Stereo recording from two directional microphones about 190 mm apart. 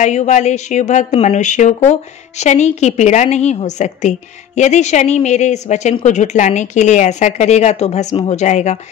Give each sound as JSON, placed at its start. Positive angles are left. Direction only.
{"t": 0.0, "sound": "speech", "side_deg": 40}